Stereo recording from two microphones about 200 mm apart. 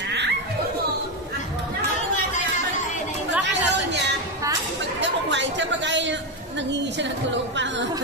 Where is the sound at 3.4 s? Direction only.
60° right (ahead or behind).